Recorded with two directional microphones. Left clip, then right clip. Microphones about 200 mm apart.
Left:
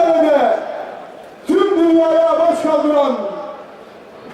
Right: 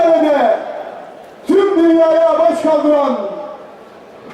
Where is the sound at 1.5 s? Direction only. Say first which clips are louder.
Right 2 dB; centre (ahead or behind).